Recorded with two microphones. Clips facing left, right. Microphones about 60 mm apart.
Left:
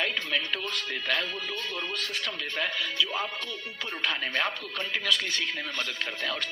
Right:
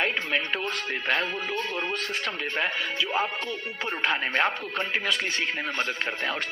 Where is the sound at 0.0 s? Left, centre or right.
Right.